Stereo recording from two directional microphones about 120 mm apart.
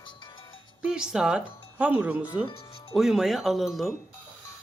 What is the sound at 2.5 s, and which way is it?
Music, 50° left (ahead or behind).